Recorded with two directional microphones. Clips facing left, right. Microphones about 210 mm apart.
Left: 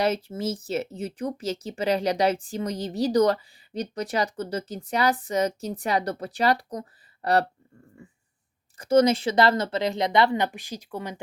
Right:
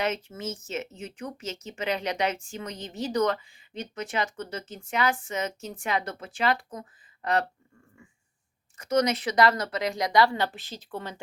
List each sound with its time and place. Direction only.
0.0 s speech: 35° left (ahead or behind)
8.0 s dog: 35° left (ahead or behind)
8.8 s speech: 30° left (ahead or behind); by 11.2 s 15° left (ahead or behind)